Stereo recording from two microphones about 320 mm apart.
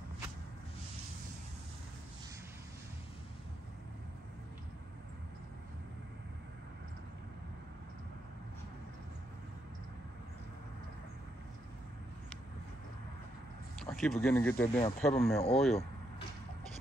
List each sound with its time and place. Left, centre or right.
13.7 s speech: centre
15.3 s speech: centre